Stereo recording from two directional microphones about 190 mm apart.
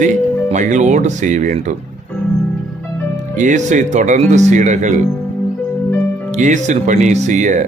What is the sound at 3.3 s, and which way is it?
Speech, 40° right (ahead or behind).